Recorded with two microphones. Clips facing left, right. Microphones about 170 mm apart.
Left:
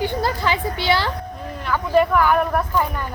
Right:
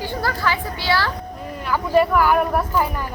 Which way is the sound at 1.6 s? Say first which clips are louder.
Even; 5° right (ahead or behind).